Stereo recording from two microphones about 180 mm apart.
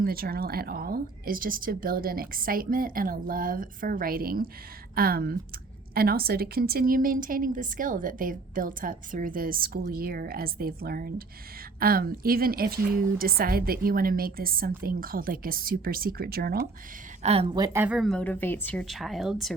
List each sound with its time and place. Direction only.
0.0 s a woman's voice: 55° right (ahead or behind)
17.2 s a woman's voice: 30° right (ahead or behind)
17.7 s a woman's voice: 5° right (ahead or behind)